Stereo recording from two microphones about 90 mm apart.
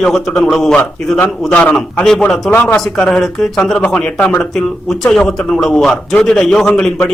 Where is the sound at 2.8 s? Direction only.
5° left (ahead or behind).